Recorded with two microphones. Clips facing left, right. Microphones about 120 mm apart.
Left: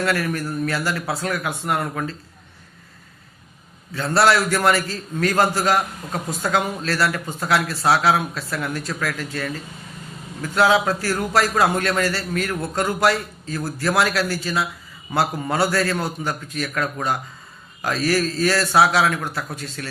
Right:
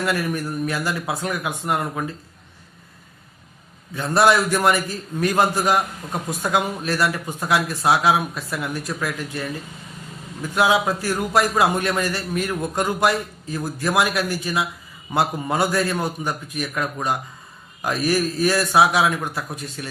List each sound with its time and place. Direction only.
0.0 s a man's voice: 15° right (ahead or behind)
3.9 s a man's voice: 15° right (ahead or behind)